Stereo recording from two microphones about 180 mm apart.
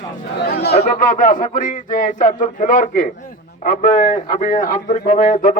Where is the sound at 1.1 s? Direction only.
50° left (ahead or behind).